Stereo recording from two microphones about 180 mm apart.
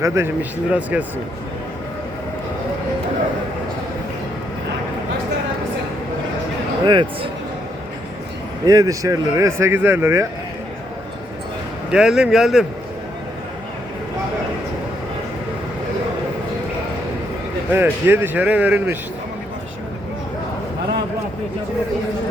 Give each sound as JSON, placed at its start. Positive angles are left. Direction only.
{"t": 0.0, "sound": "speech", "side_deg": -15}
{"t": 6.8, "sound": "speech", "side_deg": -25}
{"t": 8.6, "sound": "speech", "side_deg": -20}
{"t": 11.9, "sound": "speech", "side_deg": -5}
{"t": 17.7, "sound": "speech", "side_deg": -10}